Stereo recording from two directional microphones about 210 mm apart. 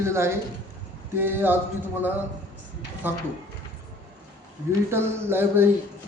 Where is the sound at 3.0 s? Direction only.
10° right (ahead or behind).